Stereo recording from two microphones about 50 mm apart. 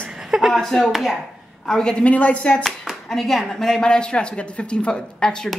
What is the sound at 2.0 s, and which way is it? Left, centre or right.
Speech, left.